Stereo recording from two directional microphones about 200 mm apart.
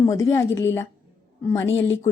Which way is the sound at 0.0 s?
15° left (ahead or behind).